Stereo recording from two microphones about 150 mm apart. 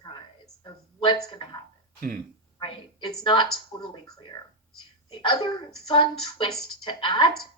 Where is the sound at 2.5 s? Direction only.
30° left (ahead or behind).